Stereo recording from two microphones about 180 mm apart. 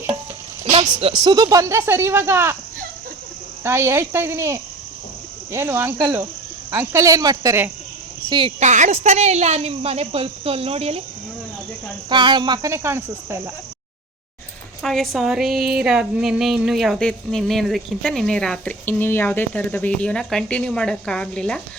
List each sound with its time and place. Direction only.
0.6 s a sound: 35° right (ahead or behind)
1.2 s speech: 20° right (ahead or behind)
3.6 s speech: 15° right (ahead or behind)
8.3 s speech: 30° right (ahead or behind)
12.0 s speech: 25° right (ahead or behind)
14.8 s a woman's voice: centre (ahead or behind)